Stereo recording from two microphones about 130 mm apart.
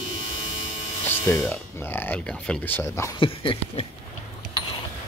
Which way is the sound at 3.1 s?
40° left (ahead or behind).